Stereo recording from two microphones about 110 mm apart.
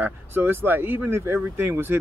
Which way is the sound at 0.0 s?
20° right (ahead or behind).